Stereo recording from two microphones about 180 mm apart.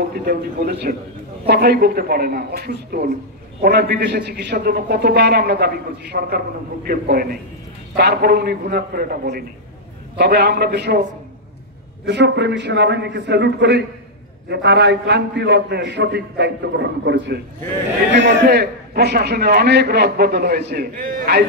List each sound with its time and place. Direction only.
0.1 s a man's voice: 55° right (ahead or behind)
7.9 s a man's voice: 65° right (ahead or behind)
12.1 s a man's voice: 70° right (ahead or behind)